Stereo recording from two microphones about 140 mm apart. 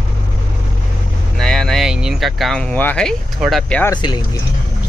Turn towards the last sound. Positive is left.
turn(degrees=30)  # may be behind; listen again after turning